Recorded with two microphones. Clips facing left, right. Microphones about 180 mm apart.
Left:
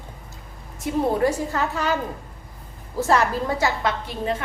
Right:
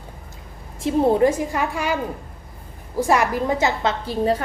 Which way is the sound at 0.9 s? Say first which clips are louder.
Right 4 dB; 20° right (ahead or behind).